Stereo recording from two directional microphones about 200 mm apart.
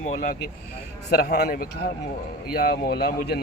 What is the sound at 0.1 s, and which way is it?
Speech, 40° left (ahead or behind).